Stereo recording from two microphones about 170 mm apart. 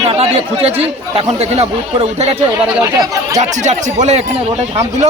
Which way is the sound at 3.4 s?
45° right (ahead or behind).